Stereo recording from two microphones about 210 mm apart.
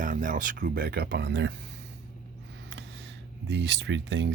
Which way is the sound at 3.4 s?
55° right (ahead or behind).